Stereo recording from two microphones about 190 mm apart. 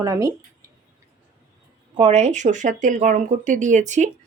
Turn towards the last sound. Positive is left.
turn(degrees=-40)  # may be behind; listen again after turning